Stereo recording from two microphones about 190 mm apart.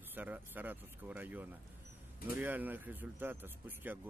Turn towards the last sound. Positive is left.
turn(degrees=-10)  # may be behind; listen again after turning